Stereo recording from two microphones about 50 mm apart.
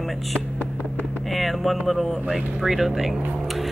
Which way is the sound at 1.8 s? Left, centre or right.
Centre.